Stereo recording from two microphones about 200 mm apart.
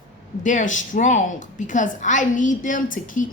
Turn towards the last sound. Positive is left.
turn(degrees=40)  # may be behind; listen again after turning